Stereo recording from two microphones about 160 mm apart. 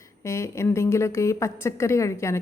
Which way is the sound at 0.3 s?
15° left (ahead or behind).